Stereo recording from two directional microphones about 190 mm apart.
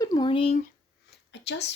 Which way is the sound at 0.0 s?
20° left (ahead or behind).